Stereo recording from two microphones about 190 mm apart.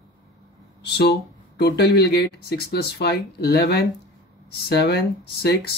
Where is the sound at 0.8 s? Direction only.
60° left (ahead or behind).